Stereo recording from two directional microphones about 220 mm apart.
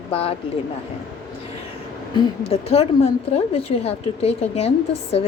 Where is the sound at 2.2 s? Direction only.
25° left (ahead or behind).